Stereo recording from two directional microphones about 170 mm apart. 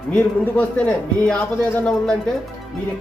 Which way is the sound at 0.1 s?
10° left (ahead or behind).